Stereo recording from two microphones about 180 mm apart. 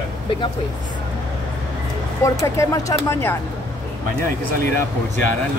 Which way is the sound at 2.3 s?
20° left (ahead or behind).